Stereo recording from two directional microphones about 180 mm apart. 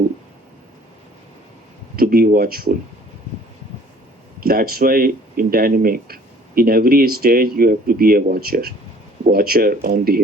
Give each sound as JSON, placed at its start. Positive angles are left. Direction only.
{"t": 2.0, "sound": "speech", "side_deg": -55}
{"t": 4.4, "sound": "speech", "side_deg": -55}